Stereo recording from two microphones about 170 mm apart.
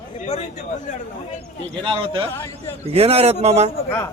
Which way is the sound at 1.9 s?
30° right (ahead or behind).